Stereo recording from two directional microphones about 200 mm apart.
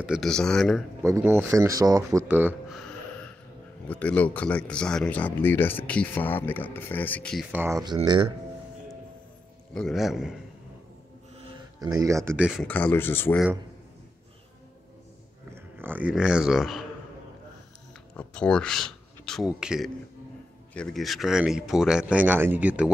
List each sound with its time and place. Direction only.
0.0 s speech: centre (ahead or behind)
1.0 s speech: 15° right (ahead or behind)
3.8 s speech: 5° left (ahead or behind)
7.5 s speech: 15° right (ahead or behind)
9.8 s speech: centre (ahead or behind)
11.8 s speech: 20° right (ahead or behind)
12.4 s speech: 5° left (ahead or behind)
15.5 s speech: 10° right (ahead or behind)
18.1 s speech: 5° left (ahead or behind)